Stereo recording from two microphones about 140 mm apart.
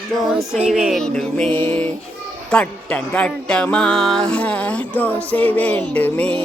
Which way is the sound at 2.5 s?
10° left (ahead or behind).